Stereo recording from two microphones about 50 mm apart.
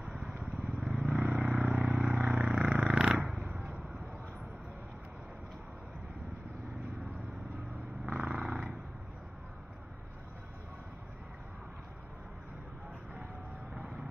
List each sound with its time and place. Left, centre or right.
0.7 s vehicle: centre
1.3 s vehicle: right
2.1 s a sound: centre
2.8 s cat: centre
3.3 s a sound: centre
8.0 s purr: centre